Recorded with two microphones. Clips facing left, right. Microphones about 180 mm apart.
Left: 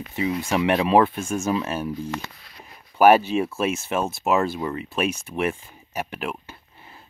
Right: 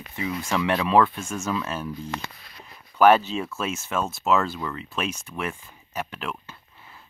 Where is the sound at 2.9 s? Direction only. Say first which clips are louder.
Left 2 dB; 10° left (ahead or behind).